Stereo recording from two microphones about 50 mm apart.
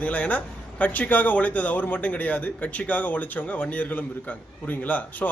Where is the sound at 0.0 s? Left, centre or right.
Left.